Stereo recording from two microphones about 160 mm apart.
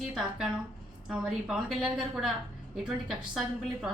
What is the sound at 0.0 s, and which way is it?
A woman's voice, 5° right (ahead or behind).